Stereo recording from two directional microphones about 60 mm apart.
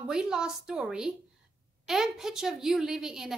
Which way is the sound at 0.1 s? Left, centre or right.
Centre.